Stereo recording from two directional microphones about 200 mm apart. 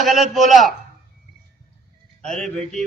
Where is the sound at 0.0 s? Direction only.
Centre (ahead or behind).